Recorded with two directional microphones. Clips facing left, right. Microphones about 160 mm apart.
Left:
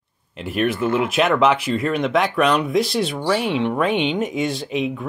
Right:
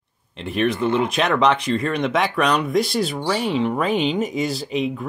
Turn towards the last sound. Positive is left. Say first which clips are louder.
# even
turn(degrees=0)  # may be behind; listen again after turning